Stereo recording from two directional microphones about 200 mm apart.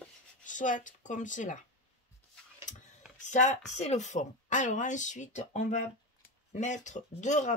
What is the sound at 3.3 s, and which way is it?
Speech, 35° left (ahead or behind).